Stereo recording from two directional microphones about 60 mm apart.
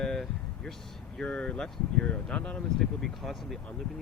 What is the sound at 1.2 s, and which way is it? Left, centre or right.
Speech, centre.